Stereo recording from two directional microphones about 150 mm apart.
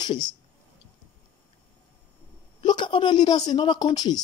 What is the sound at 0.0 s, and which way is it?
Speech, 30° left (ahead or behind).